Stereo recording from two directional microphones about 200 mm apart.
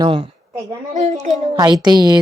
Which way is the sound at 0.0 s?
25° right (ahead or behind).